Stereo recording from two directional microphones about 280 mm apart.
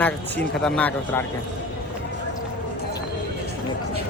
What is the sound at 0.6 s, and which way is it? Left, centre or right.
Speech, centre.